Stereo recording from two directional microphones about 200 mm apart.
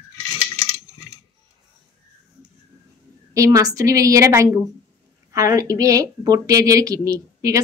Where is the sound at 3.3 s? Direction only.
15° right (ahead or behind).